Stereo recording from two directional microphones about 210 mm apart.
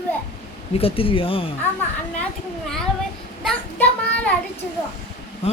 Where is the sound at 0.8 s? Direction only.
25° left (ahead or behind).